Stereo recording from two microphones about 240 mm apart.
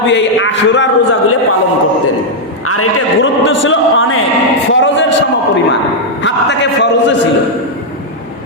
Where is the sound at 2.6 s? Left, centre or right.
Left.